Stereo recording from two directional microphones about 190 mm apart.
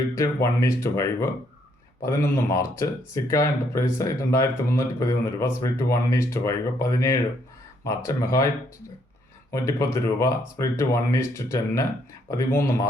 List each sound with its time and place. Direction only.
0.1 s speech: 15° left (ahead or behind)
9.5 s speech: 15° left (ahead or behind)